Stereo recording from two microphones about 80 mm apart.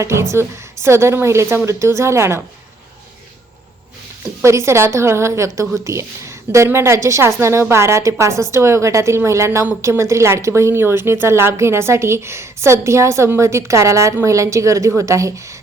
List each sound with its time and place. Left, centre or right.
0.0 s a woman's voice: right
4.4 s a woman's voice: right